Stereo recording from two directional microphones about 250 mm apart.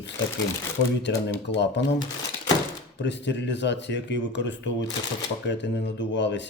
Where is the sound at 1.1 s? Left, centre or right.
Left.